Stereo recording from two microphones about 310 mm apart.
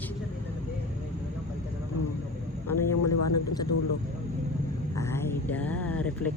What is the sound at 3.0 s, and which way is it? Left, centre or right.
Speech, left.